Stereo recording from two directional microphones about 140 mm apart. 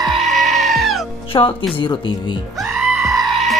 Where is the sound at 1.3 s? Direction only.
35° left (ahead or behind).